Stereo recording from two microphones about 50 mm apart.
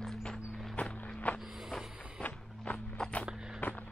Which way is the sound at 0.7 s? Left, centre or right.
Left.